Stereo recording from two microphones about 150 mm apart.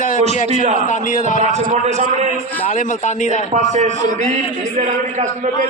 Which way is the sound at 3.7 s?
50° right (ahead or behind).